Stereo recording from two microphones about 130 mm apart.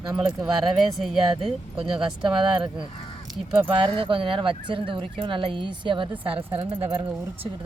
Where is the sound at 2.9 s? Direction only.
40° left (ahead or behind).